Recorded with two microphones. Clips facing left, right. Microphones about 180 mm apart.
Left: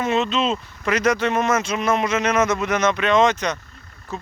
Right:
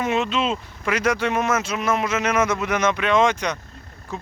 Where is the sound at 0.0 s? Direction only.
10° right (ahead or behind).